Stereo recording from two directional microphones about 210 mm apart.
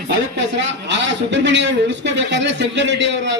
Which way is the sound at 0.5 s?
55° right (ahead or behind).